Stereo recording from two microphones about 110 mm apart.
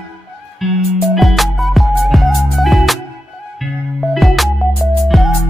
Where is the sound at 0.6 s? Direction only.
Centre (ahead or behind).